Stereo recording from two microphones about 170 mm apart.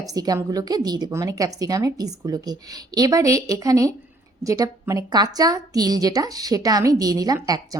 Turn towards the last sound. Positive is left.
turn(degrees=-20)  # may be behind; listen again after turning